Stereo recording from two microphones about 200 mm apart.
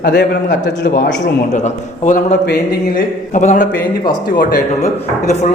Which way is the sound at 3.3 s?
35° left (ahead or behind).